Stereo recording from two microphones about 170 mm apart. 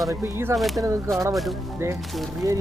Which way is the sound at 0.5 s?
Centre (ahead or behind).